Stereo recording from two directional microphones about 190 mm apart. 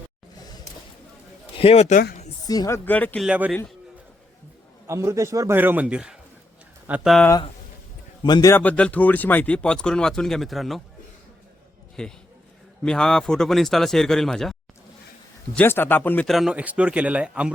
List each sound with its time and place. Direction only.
1.5 s a man's voice: 30° left (ahead or behind)
2.5 s speech: 15° left (ahead or behind)
3.2 s a man's voice: 5° right (ahead or behind)
4.9 s a man's voice: 15° right (ahead or behind)
8.2 s speech: 20° left (ahead or behind); by 10.8 s centre (ahead or behind)
12.0 s speech: 5° left (ahead or behind)
15.5 s speech: 10° left (ahead or behind); by 17.5 s 5° right (ahead or behind)